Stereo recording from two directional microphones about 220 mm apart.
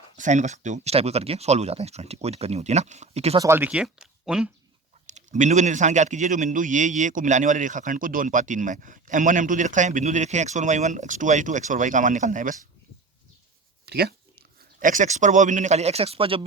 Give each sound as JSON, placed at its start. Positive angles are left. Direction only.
{"t": 0.2, "sound": "speech", "side_deg": -35}
{"t": 3.3, "sound": "speech", "side_deg": -10}
{"t": 5.0, "sound": "a man's voice", "side_deg": -35}
{"t": 13.8, "sound": "a man's voice", "side_deg": -45}